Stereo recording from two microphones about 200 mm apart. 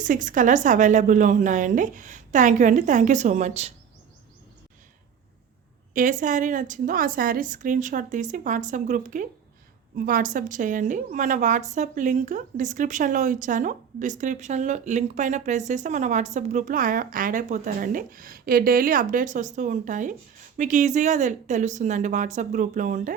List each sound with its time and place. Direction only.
0.0 s a woman's voice: 40° right (ahead or behind)
5.9 s a woman's voice: 40° right (ahead or behind)